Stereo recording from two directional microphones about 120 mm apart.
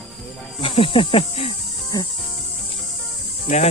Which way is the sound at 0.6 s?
50° left (ahead or behind).